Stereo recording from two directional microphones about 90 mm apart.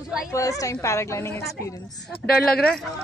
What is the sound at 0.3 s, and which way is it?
A woman's voice, 40° left (ahead or behind).